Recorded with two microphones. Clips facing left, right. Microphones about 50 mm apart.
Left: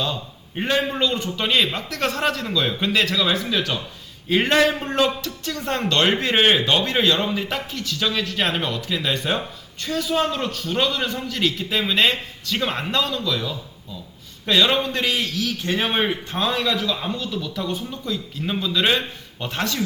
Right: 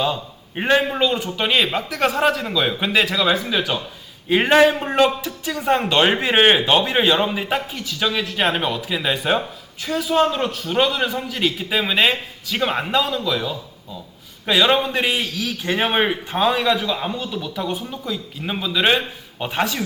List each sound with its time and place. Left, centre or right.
0.0 s a man's voice: centre